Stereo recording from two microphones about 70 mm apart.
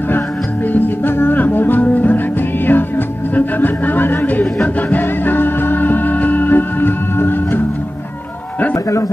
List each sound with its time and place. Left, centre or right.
0.7 s music: left
3.3 s a sound: left
4.8 s music: left